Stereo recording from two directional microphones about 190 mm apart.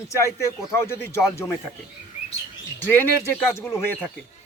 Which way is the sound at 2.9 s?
10° left (ahead or behind).